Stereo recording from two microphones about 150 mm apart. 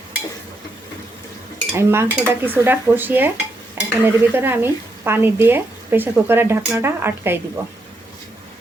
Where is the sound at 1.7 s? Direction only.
15° right (ahead or behind).